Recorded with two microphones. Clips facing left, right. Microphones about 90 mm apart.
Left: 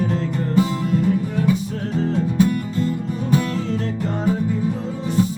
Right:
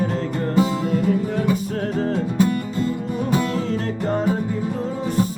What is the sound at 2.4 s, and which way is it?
Music, 25° right (ahead or behind).